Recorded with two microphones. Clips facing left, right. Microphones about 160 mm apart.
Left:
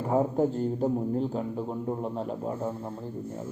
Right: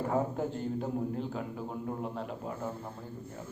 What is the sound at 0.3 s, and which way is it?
A man's voice, 35° left (ahead or behind).